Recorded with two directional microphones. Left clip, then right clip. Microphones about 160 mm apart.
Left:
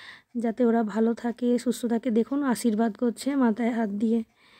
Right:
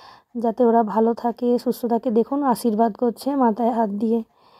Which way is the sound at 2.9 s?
20° left (ahead or behind).